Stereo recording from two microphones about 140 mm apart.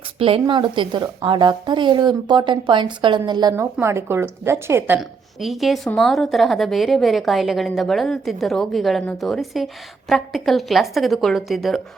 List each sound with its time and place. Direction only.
0.2 s a woman's voice: 40° right (ahead or behind)
3.5 s a woman's voice: 20° right (ahead or behind)
4.9 s a woman's voice: centre (ahead or behind)